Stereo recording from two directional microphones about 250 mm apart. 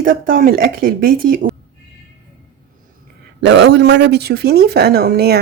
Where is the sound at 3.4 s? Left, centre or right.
Right.